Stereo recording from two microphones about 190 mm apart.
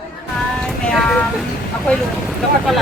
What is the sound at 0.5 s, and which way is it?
Music, 5° left (ahead or behind).